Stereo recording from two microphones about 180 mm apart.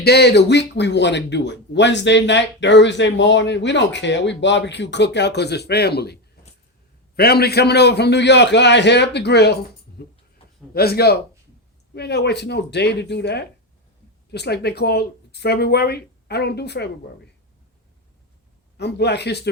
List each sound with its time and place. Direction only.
0.0 s speech: 65° left (ahead or behind)
7.2 s speech: 60° left (ahead or behind)
18.8 s speech: 70° left (ahead or behind)